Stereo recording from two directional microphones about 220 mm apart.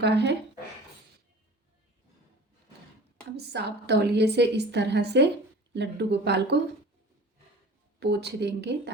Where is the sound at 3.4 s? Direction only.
50° right (ahead or behind).